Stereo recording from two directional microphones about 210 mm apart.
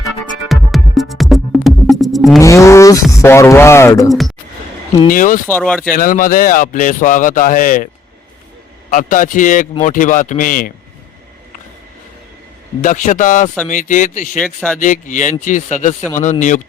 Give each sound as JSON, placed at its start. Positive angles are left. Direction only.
{"t": 0.0, "sound": "music", "side_deg": 0}
{"t": 2.4, "sound": "speech", "side_deg": 15}
{"t": 5.0, "sound": "speech", "side_deg": 40}
{"t": 5.5, "sound": "speech", "side_deg": 5}
{"t": 5.9, "sound": "speech", "side_deg": 40}
{"t": 8.9, "sound": "speech", "side_deg": 40}
{"t": 12.8, "sound": "speech", "side_deg": 35}
{"t": 14.3, "sound": "speech", "side_deg": 5}
{"t": 14.8, "sound": "speech", "side_deg": 35}